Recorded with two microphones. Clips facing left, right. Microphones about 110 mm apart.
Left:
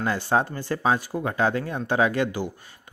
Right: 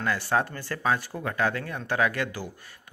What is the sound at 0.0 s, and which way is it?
Speech, 20° left (ahead or behind).